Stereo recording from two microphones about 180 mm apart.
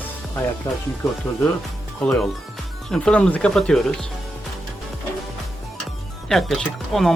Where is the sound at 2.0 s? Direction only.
Centre (ahead or behind).